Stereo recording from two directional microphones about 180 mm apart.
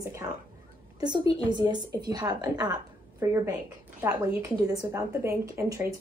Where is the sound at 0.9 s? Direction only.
25° right (ahead or behind).